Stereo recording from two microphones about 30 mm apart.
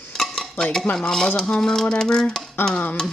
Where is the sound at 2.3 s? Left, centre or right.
Left.